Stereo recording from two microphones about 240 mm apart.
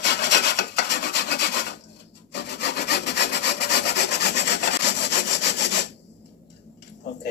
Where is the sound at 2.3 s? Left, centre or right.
Left.